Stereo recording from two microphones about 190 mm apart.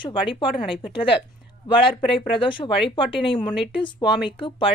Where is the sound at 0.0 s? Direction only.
25° left (ahead or behind).